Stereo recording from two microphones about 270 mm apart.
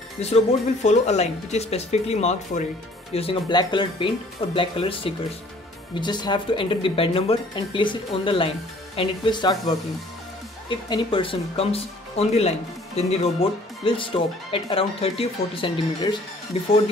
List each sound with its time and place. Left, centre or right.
0.2 s speech: left
10.9 s speech: centre